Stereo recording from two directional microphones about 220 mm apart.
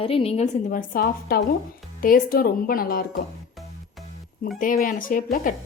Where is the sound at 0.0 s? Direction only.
25° left (ahead or behind); by 3.1 s 40° left (ahead or behind).